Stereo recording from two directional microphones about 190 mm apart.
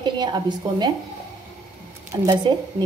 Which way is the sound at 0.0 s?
25° right (ahead or behind).